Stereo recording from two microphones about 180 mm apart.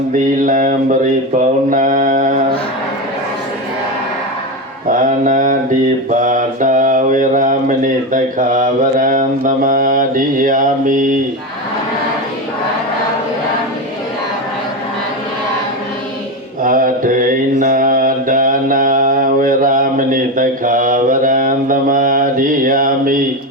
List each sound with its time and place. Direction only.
0.4 s mantra: 45° right (ahead or behind)
4.9 s mantra: 45° right (ahead or behind)
16.6 s mantra: 50° right (ahead or behind)